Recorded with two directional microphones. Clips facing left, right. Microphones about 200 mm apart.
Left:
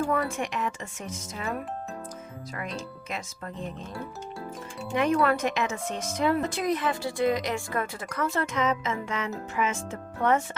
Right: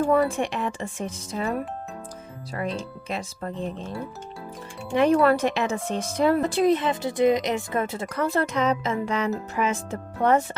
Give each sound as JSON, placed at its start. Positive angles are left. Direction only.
{"t": 0.0, "sound": "speech", "side_deg": -30}
{"t": 3.1, "sound": "speech", "side_deg": -30}
{"t": 4.9, "sound": "a woman's voice", "side_deg": -30}
{"t": 8.1, "sound": "speech", "side_deg": -35}